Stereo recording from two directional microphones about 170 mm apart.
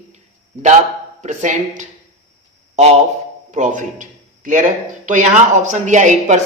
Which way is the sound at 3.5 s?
50° right (ahead or behind).